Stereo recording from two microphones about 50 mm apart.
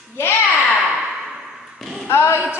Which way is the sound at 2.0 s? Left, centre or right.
Left.